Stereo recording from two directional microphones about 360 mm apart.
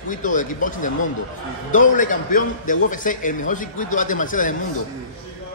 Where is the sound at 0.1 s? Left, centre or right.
Left.